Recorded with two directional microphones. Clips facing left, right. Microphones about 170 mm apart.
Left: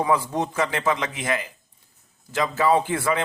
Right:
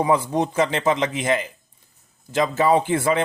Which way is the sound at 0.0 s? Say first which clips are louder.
Right 3 dB; 20° right (ahead or behind).